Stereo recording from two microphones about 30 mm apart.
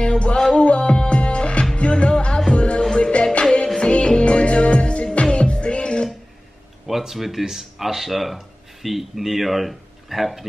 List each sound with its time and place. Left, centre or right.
0.0 s music: left
2.0 s music: left
5.1 s music: left
6.9 s speech: centre